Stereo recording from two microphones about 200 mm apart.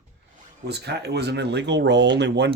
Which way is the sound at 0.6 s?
55° right (ahead or behind).